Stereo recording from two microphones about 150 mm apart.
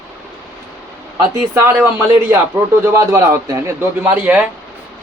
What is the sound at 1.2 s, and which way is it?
Speech, 20° right (ahead or behind).